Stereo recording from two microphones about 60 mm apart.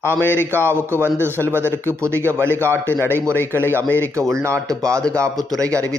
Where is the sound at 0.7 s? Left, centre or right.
Right.